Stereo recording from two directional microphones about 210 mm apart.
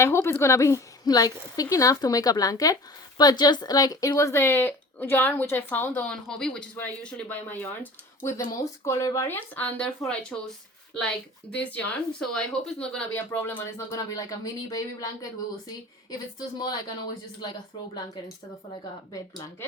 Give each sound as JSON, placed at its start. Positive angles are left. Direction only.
{"t": 0.0, "sound": "speech", "side_deg": 10}
{"t": 11.5, "sound": "speech", "side_deg": 5}